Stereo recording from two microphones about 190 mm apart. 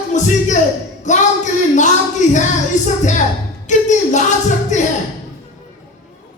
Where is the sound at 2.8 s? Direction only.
40° left (ahead or behind).